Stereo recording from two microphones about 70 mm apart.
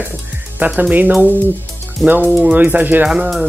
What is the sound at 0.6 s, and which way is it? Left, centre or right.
Speech, right.